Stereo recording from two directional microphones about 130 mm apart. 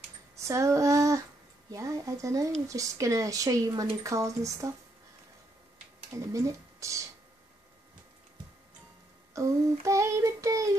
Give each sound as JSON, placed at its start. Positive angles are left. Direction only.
{"t": 0.5, "sound": "female singing", "side_deg": -25}
{"t": 1.7, "sound": "speech", "side_deg": -25}
{"t": 2.7, "sound": "child singing", "side_deg": -25}
{"t": 6.1, "sound": "child singing", "side_deg": -25}
{"t": 9.3, "sound": "child singing", "side_deg": -25}